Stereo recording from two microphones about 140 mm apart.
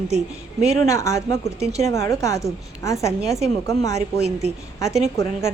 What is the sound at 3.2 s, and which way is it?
Speech, centre (ahead or behind).